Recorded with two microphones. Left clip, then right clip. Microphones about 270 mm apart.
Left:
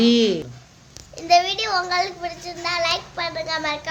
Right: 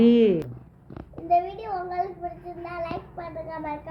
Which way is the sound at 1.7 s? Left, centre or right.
Centre.